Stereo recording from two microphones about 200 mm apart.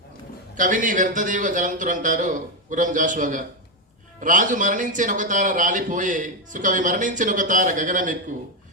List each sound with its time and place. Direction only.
0.5 s speech: 40° right (ahead or behind)